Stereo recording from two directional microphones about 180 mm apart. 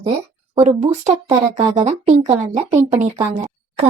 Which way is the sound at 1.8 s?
40° right (ahead or behind).